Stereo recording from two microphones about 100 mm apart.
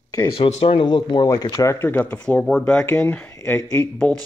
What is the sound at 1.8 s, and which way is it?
Speech, 20° left (ahead or behind).